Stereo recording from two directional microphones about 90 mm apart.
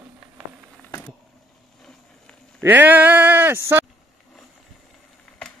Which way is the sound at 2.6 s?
20° right (ahead or behind).